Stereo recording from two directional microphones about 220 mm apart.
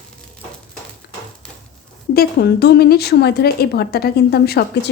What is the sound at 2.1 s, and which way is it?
A woman's voice, 45° left (ahead or behind).